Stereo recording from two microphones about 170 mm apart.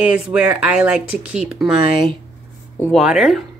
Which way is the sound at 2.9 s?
5° right (ahead or behind).